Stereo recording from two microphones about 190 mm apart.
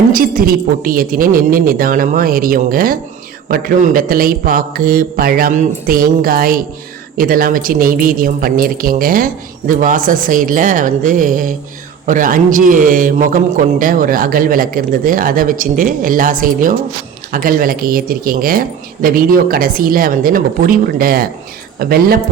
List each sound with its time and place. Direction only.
0.1 s a man's voice: 50° right (ahead or behind)